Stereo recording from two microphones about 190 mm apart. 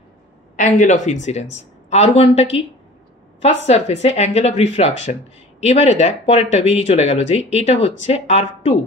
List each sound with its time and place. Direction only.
0.6 s speech: 40° left (ahead or behind)
3.4 s speech: 35° left (ahead or behind)